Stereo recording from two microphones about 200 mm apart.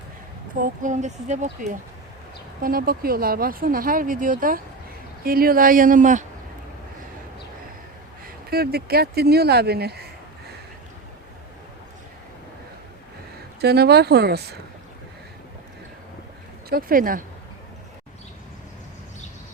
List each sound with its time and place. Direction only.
0.6 s speech: 40° right (ahead or behind)
8.4 s speech: 50° right (ahead or behind)
13.6 s speech: 55° right (ahead or behind)
16.6 s speech: 45° right (ahead or behind)